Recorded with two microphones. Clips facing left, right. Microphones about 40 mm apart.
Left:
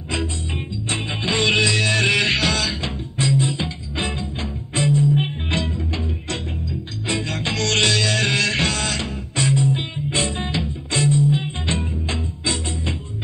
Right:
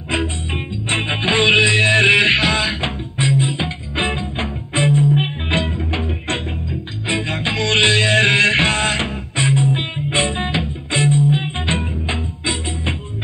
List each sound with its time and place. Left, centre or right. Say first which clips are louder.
0.1 s music: right 4 dB; right